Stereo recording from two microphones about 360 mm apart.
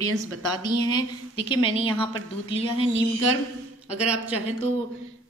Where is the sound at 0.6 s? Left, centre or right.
Centre.